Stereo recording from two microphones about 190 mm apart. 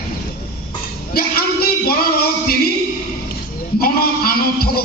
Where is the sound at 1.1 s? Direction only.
55° left (ahead or behind).